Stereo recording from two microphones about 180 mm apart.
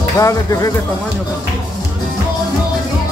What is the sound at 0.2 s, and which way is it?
Speech, 20° left (ahead or behind).